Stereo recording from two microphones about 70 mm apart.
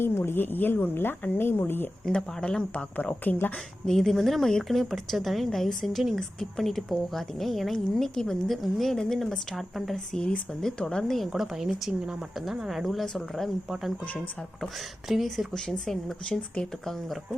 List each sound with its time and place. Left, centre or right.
0.0 s speech: left
2.0 s speech: centre
3.8 s a woman's voice: centre
11.2 s a woman's voice: centre
14.6 s a woman's voice: centre
15.5 s speech: centre